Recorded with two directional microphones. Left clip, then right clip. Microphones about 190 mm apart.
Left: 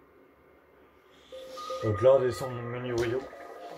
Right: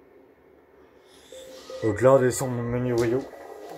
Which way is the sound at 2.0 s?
55° right (ahead or behind).